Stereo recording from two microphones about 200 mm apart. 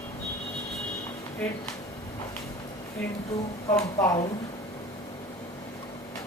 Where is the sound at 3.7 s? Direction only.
15° left (ahead or behind).